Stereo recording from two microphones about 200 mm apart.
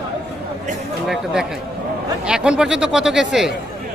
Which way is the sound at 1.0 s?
Centre (ahead or behind).